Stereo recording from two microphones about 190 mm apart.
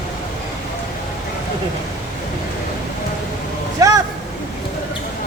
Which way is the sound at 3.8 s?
20° right (ahead or behind).